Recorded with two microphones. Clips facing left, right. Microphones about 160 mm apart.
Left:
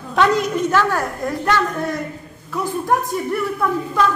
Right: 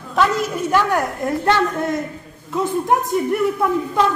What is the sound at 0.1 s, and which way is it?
A woman's voice, centre (ahead or behind).